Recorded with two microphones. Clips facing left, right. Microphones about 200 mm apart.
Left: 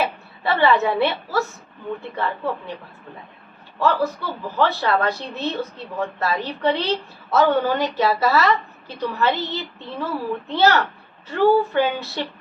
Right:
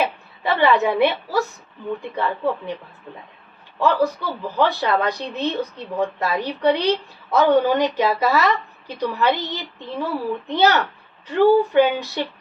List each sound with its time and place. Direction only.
0.0 s a woman's voice: 15° right (ahead or behind)
3.8 s a woman's voice: 15° right (ahead or behind)